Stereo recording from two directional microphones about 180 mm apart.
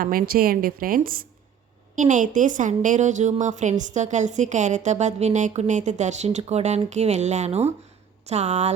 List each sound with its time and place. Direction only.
0.0 s a woman's voice: 55° right (ahead or behind); by 8.7 s 40° right (ahead or behind)